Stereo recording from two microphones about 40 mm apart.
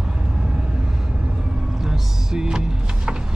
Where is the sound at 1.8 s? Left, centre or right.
Centre.